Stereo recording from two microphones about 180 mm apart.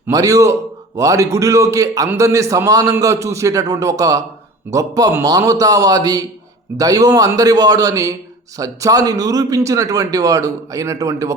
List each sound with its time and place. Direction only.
0.1 s a man's voice: 20° right (ahead or behind)